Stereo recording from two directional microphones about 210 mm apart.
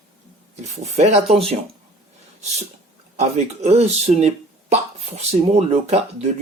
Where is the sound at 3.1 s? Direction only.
30° right (ahead or behind).